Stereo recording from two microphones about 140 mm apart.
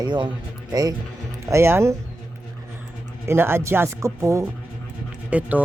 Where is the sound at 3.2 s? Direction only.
15° right (ahead or behind).